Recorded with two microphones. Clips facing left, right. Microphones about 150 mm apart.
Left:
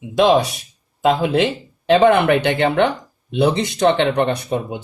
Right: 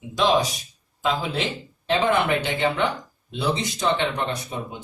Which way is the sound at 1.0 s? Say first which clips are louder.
Left 9 dB; 65° left (ahead or behind).